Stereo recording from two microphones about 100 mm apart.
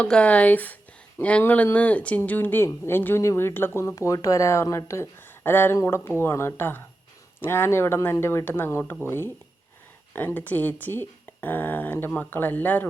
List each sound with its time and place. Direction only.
0.0 s speech: 10° left (ahead or behind)